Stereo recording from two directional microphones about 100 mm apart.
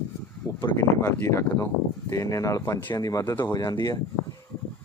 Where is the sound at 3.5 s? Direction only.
45° left (ahead or behind).